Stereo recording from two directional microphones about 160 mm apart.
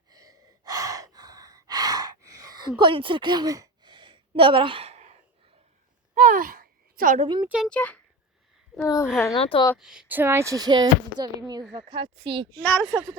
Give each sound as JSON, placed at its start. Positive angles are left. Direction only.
{"t": 0.1, "sound": "gasp", "side_deg": -25}
{"t": 6.1, "sound": "a sound", "side_deg": -55}
{"t": 7.2, "sound": "speech", "side_deg": -30}
{"t": 7.4, "sound": "a child's voice", "side_deg": -5}
{"t": 7.7, "sound": "a child's voice", "side_deg": 10}
{"t": 9.3, "sound": "speech", "side_deg": 35}
{"t": 9.7, "sound": "speech", "side_deg": -5}